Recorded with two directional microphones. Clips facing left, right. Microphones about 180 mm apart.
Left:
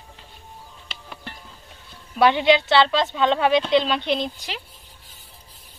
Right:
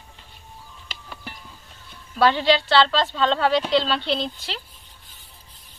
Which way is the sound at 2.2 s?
20° left (ahead or behind).